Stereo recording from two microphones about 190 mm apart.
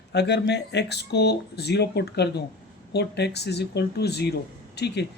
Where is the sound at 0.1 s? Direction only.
65° left (ahead or behind).